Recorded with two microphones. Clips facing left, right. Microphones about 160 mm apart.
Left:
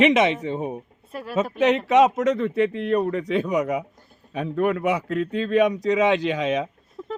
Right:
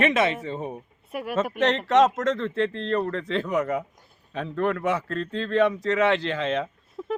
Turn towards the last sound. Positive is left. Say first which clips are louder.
# right 2 dB
turn(degrees=-5)  # may be behind; listen again after turning